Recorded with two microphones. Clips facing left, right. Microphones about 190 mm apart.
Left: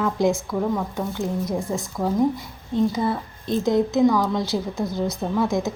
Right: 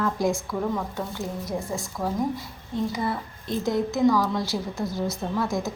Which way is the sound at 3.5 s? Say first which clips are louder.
Left 5 dB; 20° left (ahead or behind).